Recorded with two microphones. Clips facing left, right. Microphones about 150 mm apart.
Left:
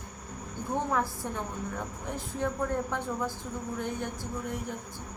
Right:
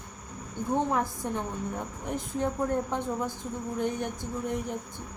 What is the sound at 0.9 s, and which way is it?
A woman's voice, 20° right (ahead or behind).